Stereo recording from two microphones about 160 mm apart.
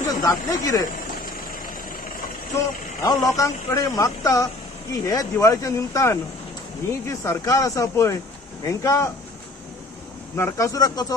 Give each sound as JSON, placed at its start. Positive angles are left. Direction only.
{"t": 0.2, "sound": "speech", "side_deg": 20}
{"t": 1.2, "sound": "vehicle", "side_deg": 60}
{"t": 3.0, "sound": "speech", "side_deg": 20}
{"t": 10.3, "sound": "speech", "side_deg": 15}